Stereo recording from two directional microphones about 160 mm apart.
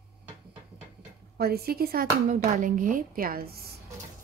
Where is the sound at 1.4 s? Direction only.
75° right (ahead or behind).